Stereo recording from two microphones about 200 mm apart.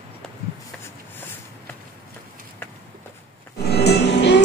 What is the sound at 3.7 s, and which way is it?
Music, 55° left (ahead or behind).